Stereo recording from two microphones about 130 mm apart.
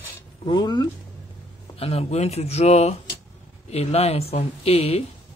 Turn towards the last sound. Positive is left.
turn(degrees=50)  # may be behind; listen again after turning